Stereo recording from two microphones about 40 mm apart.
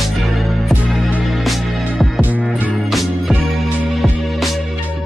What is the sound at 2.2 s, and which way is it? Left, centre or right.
Music, right.